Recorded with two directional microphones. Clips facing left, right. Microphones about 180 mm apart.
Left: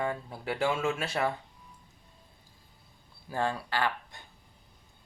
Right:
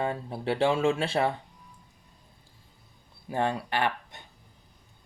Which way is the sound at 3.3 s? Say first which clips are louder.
Right 3 dB; 20° right (ahead or behind).